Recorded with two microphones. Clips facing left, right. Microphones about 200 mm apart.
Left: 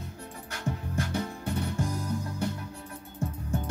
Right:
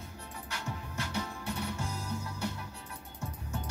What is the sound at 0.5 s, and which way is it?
Music, 50° left (ahead or behind).